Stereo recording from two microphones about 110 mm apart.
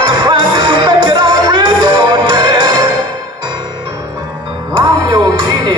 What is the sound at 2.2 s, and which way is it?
Music, 40° right (ahead or behind).